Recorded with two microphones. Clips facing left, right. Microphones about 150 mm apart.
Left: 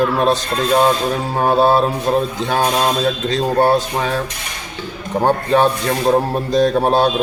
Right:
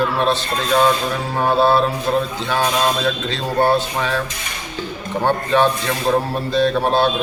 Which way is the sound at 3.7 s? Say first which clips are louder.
Left 2 dB; 40° left (ahead or behind).